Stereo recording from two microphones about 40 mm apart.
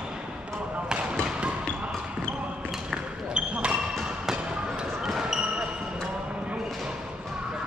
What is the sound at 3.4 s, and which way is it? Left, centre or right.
Basketball bounce, right.